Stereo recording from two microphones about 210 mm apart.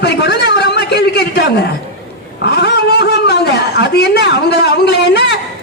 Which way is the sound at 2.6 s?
50° left (ahead or behind).